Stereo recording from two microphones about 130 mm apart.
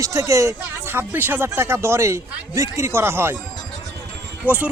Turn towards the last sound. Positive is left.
turn(degrees=-15)  # may be behind; listen again after turning